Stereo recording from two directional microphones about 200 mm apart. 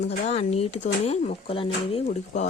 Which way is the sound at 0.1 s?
30° left (ahead or behind).